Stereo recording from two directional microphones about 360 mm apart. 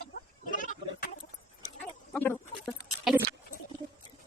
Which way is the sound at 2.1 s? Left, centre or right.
Centre.